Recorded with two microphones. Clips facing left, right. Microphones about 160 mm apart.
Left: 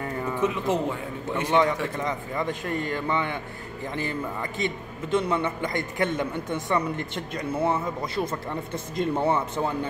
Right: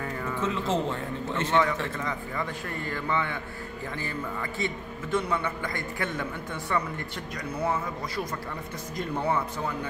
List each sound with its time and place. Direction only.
0.2 s a man's voice: 15° left (ahead or behind)